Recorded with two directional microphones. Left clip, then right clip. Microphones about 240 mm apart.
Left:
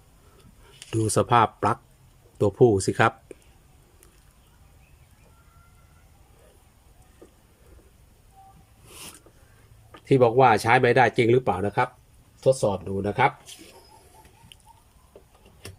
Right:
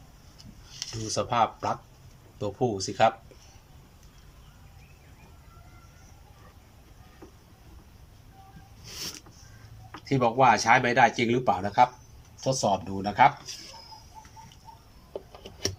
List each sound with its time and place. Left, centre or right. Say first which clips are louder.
1.1 s speech: left 5 dB; left
10.1 s speech: left 4 dB; left